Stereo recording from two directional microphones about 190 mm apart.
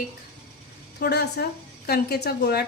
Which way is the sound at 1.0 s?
55° left (ahead or behind).